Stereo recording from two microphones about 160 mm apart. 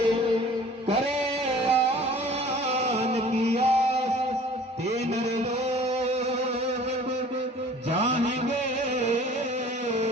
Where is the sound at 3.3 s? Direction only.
40° right (ahead or behind).